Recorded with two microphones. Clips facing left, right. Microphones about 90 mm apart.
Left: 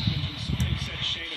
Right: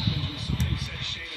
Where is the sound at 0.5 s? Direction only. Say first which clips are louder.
Left 1 dB; 15° right (ahead or behind).